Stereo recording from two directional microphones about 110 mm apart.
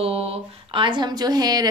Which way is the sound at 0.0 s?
65° right (ahead or behind).